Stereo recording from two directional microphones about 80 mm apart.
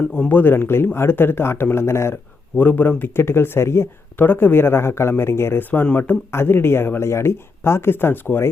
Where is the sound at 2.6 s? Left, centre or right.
Left.